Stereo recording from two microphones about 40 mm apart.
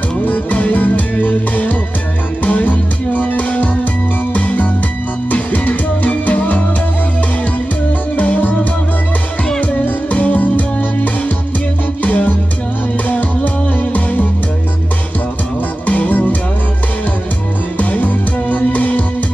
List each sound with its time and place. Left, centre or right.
0.3 s music: left
9.6 s music: left
15.9 s music: left
17.7 s music: left